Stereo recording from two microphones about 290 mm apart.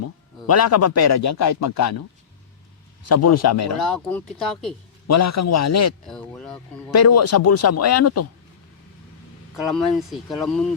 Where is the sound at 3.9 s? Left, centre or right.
Centre.